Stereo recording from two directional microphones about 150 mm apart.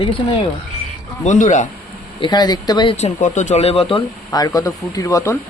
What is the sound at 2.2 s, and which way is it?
Speech, 30° left (ahead or behind).